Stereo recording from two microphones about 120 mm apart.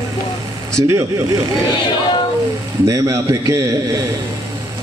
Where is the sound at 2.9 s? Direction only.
25° right (ahead or behind).